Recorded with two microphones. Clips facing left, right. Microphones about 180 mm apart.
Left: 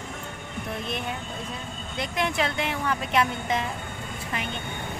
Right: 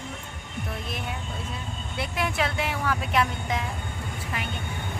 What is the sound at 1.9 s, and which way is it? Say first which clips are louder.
Speech: left 1 dB; 5° right (ahead or behind).